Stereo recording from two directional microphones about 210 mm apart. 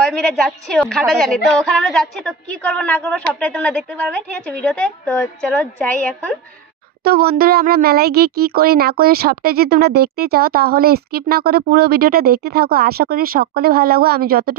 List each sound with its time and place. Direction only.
0.0 s a woman's voice: 5° left (ahead or behind)
7.0 s a child's voice: 45° right (ahead or behind)